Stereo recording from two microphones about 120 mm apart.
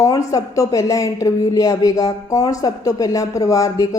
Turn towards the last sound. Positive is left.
turn(degrees=30)  # may be behind; listen again after turning